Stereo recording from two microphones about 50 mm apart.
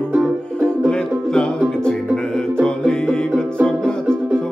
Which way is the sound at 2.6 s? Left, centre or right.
Centre.